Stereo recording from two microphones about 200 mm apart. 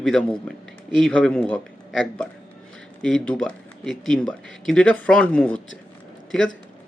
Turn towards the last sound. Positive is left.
turn(degrees=5)  # may be behind; listen again after turning